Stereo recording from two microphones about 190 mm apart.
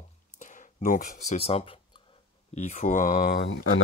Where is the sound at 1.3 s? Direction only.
30° left (ahead or behind); by 3.8 s 65° left (ahead or behind).